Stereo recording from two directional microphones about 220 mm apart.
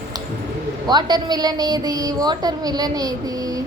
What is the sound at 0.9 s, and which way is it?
A woman's voice, 20° right (ahead or behind).